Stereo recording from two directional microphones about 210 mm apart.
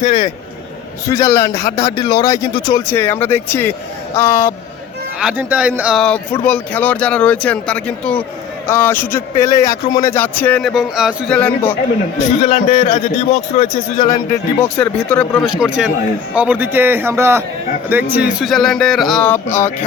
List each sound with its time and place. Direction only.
1.0 s a man's voice: 15° left (ahead or behind)
5.2 s a man's voice: 5° right (ahead or behind)
12.3 s a man's voice: 30° left (ahead or behind)
14.6 s a man's voice: 5° left (ahead or behind)